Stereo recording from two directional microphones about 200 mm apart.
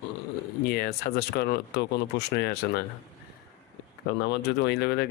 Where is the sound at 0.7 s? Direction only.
50° left (ahead or behind).